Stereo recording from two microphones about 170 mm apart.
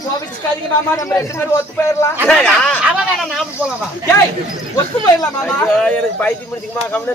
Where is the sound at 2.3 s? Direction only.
5° left (ahead or behind).